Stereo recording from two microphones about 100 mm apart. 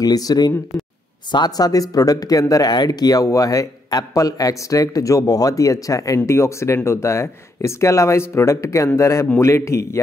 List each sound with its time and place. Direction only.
0.0 s speech: 40° left (ahead or behind)